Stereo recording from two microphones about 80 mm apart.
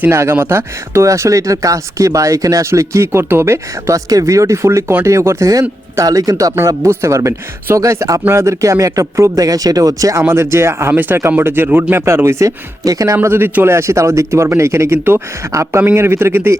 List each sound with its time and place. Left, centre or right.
0.0 s speech: right
10.2 s speech: right
13.2 s speech: right
15.5 s speech: right